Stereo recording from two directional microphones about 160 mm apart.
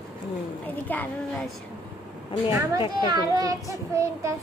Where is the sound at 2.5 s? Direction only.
20° right (ahead or behind).